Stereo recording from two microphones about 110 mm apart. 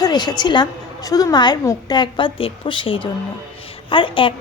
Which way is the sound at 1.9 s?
45° left (ahead or behind).